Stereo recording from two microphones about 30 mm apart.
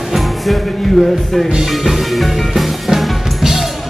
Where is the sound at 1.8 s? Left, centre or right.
Centre.